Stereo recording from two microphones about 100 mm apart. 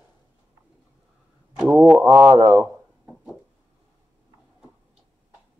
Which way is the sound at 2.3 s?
35° right (ahead or behind).